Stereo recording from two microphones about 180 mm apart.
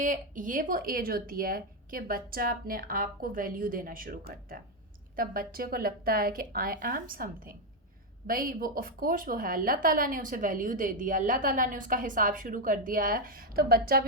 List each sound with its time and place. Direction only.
0.0 s speech: 45° right (ahead or behind)